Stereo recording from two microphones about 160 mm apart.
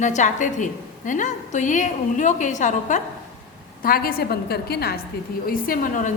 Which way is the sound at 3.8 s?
65° left (ahead or behind).